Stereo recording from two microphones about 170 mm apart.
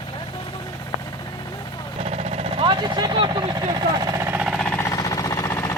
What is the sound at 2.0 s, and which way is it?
Vehicle, 35° right (ahead or behind).